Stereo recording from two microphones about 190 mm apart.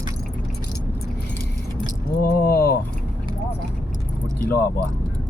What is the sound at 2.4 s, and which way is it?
Speech, 55° left (ahead or behind).